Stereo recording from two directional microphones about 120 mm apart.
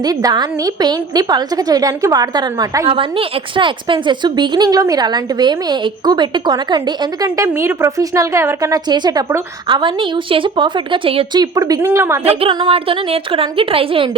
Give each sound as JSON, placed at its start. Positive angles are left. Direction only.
{"t": 0.0, "sound": "a woman's voice", "side_deg": -35}
{"t": 2.9, "sound": "a woman's voice", "side_deg": -45}
{"t": 11.3, "sound": "a woman's voice", "side_deg": -30}
{"t": 12.3, "sound": "a woman's voice", "side_deg": -50}